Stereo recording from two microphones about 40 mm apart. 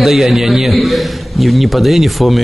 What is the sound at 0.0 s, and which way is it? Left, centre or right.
A man's voice, centre.